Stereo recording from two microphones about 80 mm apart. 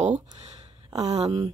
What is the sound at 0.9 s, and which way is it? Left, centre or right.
Speech, right.